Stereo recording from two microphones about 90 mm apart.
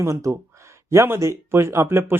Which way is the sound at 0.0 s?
35° right (ahead or behind).